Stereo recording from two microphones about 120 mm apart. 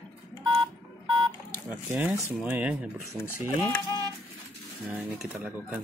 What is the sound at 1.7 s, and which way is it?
Cattle, 10° right (ahead or behind).